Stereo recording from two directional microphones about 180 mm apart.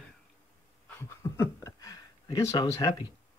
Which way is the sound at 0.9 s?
15° left (ahead or behind).